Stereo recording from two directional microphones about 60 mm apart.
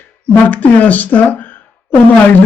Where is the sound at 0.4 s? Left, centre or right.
Left.